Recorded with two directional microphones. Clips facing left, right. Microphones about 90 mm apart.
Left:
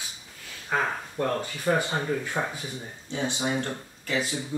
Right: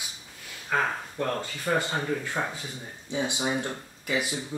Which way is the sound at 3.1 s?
15° right (ahead or behind).